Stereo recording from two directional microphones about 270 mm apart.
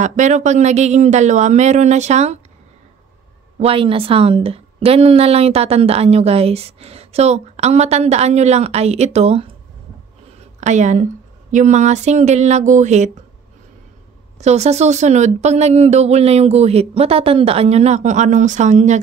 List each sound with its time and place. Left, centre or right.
0.0 s a woman's voice: right
3.5 s a woman's voice: right
10.6 s a woman's voice: right
14.4 s a woman's voice: right